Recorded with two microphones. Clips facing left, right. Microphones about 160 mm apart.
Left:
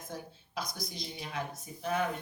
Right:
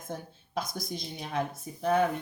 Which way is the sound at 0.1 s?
50° right (ahead or behind).